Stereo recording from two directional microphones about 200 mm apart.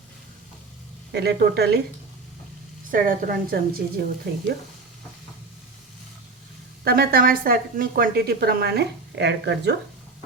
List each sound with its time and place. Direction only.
1.1 s a woman's voice: 55° right (ahead or behind)
2.9 s a woman's voice: 45° right (ahead or behind)
6.8 s a woman's voice: 50° right (ahead or behind)